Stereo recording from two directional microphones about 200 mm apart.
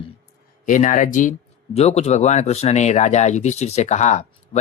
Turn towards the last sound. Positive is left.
turn(degrees=35)  # may be behind; listen again after turning